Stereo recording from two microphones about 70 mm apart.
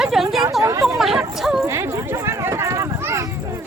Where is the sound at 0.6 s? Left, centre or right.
Right.